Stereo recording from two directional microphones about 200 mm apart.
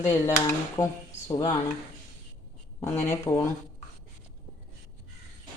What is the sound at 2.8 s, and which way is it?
Speech, 15° left (ahead or behind).